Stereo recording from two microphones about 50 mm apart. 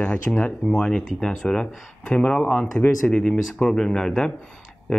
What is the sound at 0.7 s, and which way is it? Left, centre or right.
Speech, centre.